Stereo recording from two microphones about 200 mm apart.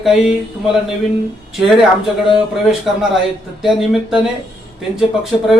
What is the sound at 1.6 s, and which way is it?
Speech, centre (ahead or behind).